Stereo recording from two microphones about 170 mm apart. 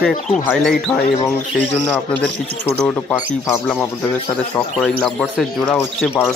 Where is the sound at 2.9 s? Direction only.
10° left (ahead or behind).